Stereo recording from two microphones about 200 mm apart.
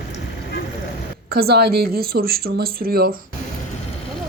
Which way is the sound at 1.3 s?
50° right (ahead or behind).